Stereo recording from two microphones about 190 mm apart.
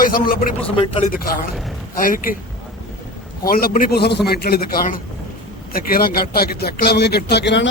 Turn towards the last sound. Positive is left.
turn(degrees=65)  # may be behind; listen again after turning